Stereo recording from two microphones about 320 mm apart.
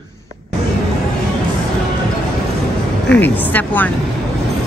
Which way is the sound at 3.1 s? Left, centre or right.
Centre.